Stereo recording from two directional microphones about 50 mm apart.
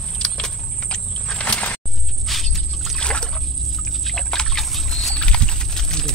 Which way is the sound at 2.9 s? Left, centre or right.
Centre.